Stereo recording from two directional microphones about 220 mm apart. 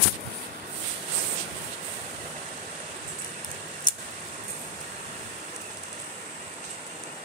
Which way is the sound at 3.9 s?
20° left (ahead or behind).